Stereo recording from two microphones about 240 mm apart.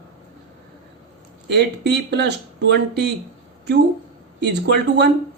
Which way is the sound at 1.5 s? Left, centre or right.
Right.